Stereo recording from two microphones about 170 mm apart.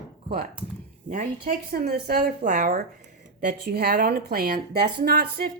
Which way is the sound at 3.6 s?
70° right (ahead or behind).